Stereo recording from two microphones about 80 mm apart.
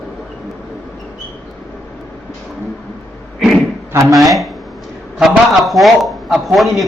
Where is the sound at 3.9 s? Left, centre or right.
Right.